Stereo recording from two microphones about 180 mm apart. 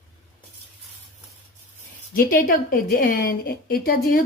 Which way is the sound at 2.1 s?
55° left (ahead or behind).